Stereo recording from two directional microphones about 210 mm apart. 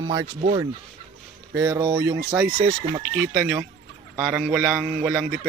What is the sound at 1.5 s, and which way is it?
Speech, 10° right (ahead or behind).